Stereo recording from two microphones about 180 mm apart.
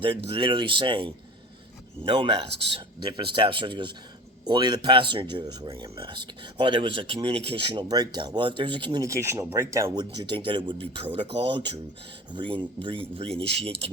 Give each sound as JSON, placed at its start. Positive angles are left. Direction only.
{"t": 0.3, "sound": "a man's voice", "side_deg": -30}